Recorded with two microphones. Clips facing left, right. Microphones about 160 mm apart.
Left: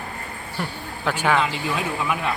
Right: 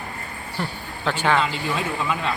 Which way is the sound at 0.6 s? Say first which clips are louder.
Even; 10° left (ahead or behind).